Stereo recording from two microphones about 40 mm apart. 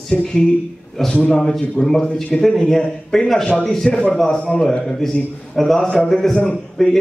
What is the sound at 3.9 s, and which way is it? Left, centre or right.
Speech, left.